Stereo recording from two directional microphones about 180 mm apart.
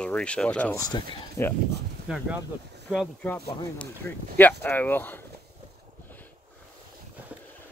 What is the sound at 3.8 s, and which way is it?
Speech, 10° left (ahead or behind).